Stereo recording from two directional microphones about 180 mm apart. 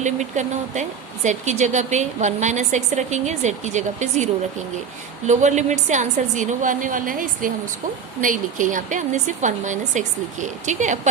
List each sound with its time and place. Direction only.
0.0 s a woman's voice: 40° right (ahead or behind)